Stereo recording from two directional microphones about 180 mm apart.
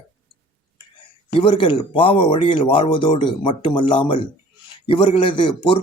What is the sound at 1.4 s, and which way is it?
Speech, 30° left (ahead or behind).